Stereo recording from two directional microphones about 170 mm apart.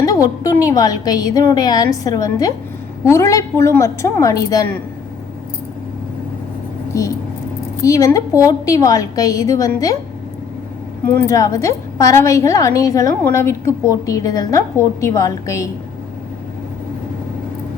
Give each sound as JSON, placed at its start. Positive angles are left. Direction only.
{"t": 0.0, "sound": "a woman's voice", "side_deg": 20}
{"t": 7.8, "sound": "a woman's voice", "side_deg": 20}
{"t": 11.3, "sound": "a woman's voice", "side_deg": 20}